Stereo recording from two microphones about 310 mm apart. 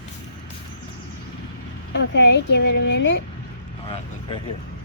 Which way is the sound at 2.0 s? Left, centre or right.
Left.